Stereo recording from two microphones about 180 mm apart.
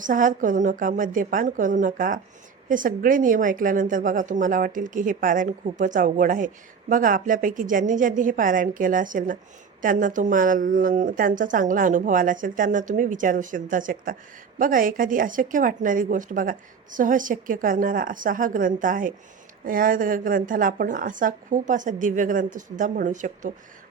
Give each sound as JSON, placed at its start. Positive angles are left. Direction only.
{"t": 0.0, "sound": "a woman's voice", "side_deg": -45}